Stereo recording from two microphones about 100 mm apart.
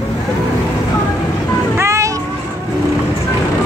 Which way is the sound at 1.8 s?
30° right (ahead or behind).